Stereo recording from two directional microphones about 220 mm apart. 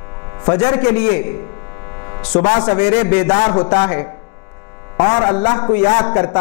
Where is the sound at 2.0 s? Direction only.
20° left (ahead or behind).